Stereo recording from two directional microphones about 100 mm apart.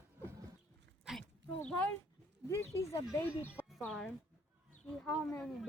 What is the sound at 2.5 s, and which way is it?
Speech, 30° left (ahead or behind).